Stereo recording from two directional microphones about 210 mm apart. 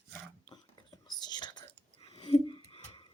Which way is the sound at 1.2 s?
20° left (ahead or behind).